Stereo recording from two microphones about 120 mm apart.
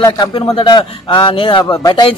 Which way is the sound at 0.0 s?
40° left (ahead or behind).